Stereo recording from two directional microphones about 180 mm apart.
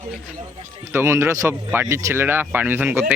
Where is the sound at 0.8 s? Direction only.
15° right (ahead or behind).